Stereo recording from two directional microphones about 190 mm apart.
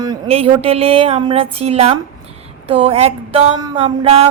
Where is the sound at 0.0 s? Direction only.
25° right (ahead or behind).